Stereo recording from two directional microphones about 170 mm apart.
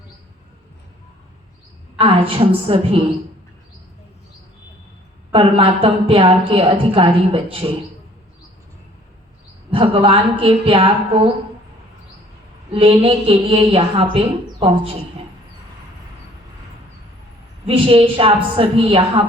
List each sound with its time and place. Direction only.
2.0 s a woman's voice: 30° right (ahead or behind)
5.3 s a woman's voice: 30° right (ahead or behind)
9.6 s a woman's voice: 30° right (ahead or behind)
12.7 s a woman's voice: 35° right (ahead or behind)
17.7 s a woman's voice: 30° right (ahead or behind)